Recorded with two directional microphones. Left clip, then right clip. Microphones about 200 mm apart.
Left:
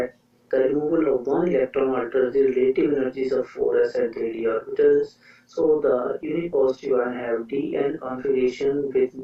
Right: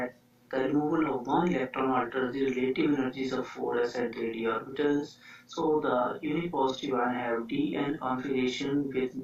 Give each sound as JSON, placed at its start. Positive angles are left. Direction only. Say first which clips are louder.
{"t": 0.5, "sound": "speech", "louder": "left 8 dB", "side_deg": -40}